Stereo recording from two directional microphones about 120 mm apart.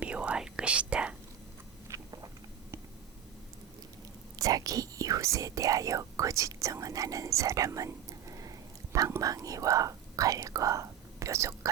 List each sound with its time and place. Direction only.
0.0 s whispering: 10° right (ahead or behind)
1.9 s a sound: 30° right (ahead or behind)
4.4 s speech: 30° right (ahead or behind)